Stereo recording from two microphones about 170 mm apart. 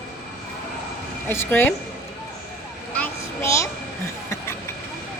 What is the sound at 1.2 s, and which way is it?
Speech, 15° left (ahead or behind).